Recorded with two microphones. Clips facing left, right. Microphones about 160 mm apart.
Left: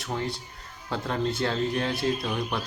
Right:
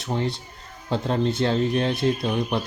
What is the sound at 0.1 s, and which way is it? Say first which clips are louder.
Speech: right 5 dB; 25° right (ahead or behind).